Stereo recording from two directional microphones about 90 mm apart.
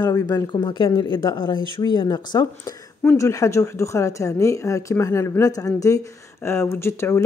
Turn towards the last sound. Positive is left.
turn(degrees=30)  # may be behind; listen again after turning